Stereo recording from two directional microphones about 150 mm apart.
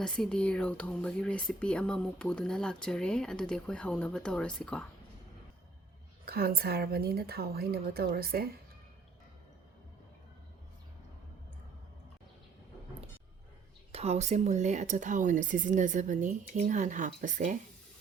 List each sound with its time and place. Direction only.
0.0 s speech: 5° left (ahead or behind)
6.2 s speech: 90° right
13.9 s speech: 45° right (ahead or behind)